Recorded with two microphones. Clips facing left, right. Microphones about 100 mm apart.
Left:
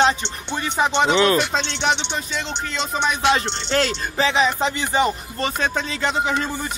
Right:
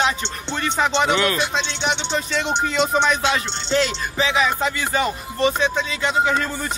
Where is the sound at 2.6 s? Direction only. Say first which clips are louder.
Right 8 dB; 5° right (ahead or behind).